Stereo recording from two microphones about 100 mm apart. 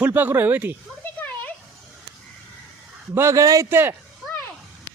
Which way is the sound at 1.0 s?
15° left (ahead or behind).